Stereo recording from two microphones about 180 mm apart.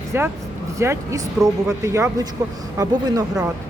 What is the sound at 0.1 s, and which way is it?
Speech, 10° right (ahead or behind).